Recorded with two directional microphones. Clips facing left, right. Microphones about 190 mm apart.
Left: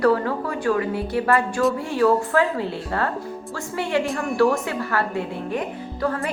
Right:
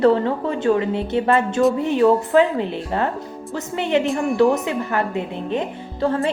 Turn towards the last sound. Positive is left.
turn(degrees=-25)  # may be behind; listen again after turning